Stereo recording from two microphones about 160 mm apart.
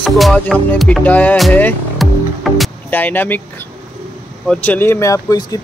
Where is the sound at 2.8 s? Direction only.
10° left (ahead or behind).